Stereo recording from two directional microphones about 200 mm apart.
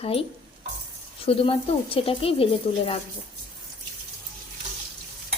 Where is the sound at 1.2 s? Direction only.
30° left (ahead or behind).